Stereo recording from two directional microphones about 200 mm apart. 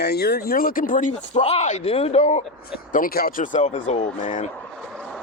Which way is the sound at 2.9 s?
45° left (ahead or behind).